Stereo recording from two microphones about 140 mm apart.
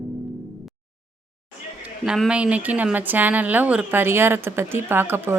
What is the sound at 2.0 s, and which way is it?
A woman's voice, 5° right (ahead or behind).